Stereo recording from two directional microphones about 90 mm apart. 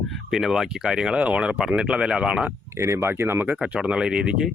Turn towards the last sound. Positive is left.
turn(degrees=-10)  # may be behind; listen again after turning